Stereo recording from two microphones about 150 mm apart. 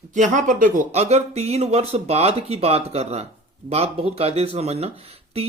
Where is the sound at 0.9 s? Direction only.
45° right (ahead or behind).